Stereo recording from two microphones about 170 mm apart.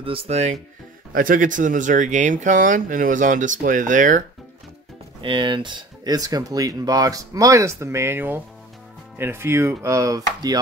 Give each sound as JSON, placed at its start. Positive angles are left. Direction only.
{"t": 0.0, "sound": "speech", "side_deg": -35}
{"t": 1.1, "sound": "speech", "side_deg": -55}
{"t": 5.2, "sound": "speech", "side_deg": -30}
{"t": 9.2, "sound": "chopping", "side_deg": -15}